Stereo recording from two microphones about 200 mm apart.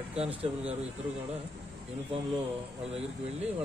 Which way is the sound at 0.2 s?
30° right (ahead or behind).